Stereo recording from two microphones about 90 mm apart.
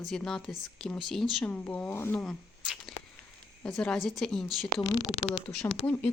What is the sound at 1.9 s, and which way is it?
Speech, 30° left (ahead or behind).